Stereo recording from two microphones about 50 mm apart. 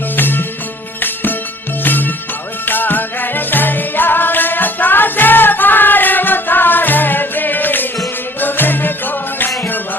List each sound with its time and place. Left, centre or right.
0.2 s music: left